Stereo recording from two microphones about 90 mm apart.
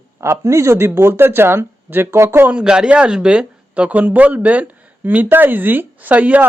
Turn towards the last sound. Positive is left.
turn(degrees=-15)  # may be behind; listen again after turning